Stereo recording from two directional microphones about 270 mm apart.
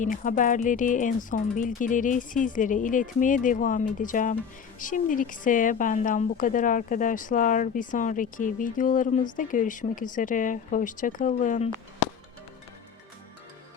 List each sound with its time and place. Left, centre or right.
0.0 s speech: left